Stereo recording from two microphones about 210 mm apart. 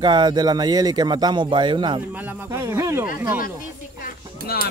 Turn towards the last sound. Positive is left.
turn(degrees=45)  # may be behind; listen again after turning